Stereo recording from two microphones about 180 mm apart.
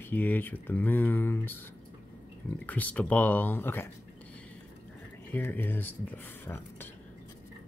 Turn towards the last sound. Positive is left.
turn(degrees=10)  # may be behind; listen again after turning